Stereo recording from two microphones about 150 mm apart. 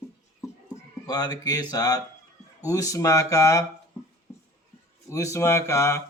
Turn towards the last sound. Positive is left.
turn(degrees=20)  # may be behind; listen again after turning